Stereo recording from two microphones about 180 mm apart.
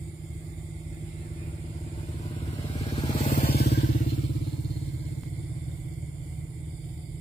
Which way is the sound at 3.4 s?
60° left (ahead or behind).